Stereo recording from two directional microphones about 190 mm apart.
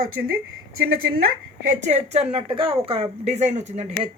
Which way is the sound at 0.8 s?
50° right (ahead or behind).